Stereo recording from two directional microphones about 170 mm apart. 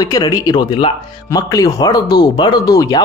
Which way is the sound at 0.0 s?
20° left (ahead or behind).